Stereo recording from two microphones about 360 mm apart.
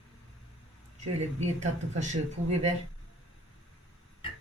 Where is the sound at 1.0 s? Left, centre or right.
Centre.